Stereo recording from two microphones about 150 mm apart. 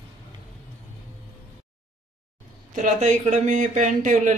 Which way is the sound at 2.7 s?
55° right (ahead or behind).